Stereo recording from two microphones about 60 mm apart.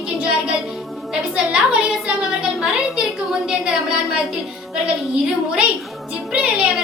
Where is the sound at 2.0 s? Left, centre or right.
Centre.